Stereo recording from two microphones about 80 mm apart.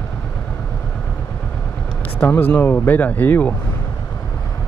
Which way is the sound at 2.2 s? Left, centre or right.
Left.